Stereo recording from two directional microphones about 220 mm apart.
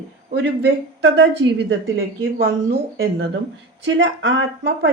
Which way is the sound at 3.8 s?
55° right (ahead or behind).